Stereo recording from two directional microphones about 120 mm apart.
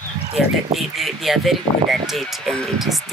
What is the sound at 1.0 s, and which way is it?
Speech, centre (ahead or behind).